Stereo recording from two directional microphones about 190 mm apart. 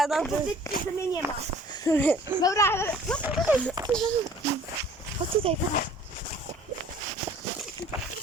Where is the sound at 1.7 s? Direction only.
15° left (ahead or behind).